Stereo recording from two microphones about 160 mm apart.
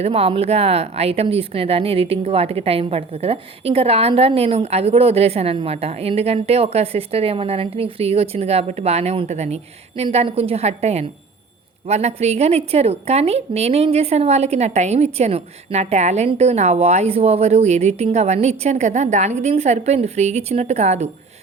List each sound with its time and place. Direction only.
0.0 s a woman's voice: 35° right (ahead or behind)